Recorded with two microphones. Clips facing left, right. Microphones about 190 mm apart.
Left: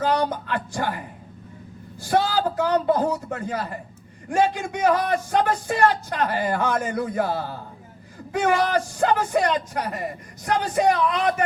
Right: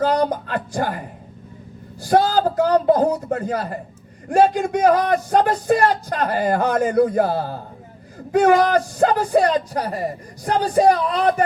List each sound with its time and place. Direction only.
0.0 s a man's voice: 35° right (ahead or behind)